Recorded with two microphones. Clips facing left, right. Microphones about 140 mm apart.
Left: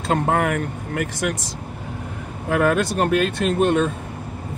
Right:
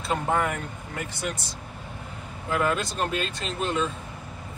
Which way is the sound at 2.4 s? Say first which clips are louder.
Left 7 dB; 60° left (ahead or behind).